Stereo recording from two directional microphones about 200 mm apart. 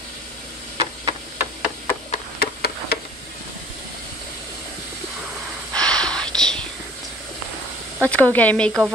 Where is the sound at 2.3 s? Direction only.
50° left (ahead or behind).